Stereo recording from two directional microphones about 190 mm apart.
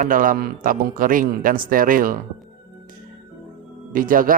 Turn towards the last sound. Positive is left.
turn(degrees=-45)  # may be behind; listen again after turning